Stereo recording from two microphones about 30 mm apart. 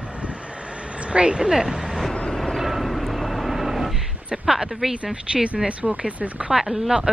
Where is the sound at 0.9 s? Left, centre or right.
Right; by 2.0 s centre.